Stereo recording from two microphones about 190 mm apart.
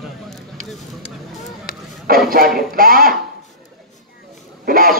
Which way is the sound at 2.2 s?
50° right (ahead or behind).